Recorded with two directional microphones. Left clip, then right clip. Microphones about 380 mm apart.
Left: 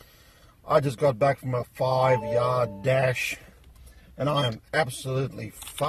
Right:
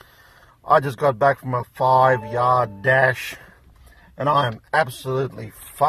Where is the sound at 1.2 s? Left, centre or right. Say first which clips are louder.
Right 5 dB; centre.